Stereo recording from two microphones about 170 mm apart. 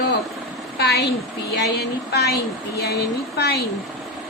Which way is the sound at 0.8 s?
75° left (ahead or behind).